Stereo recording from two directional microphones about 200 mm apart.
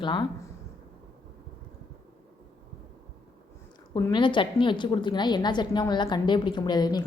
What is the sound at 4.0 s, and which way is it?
A woman's voice, 20° left (ahead or behind).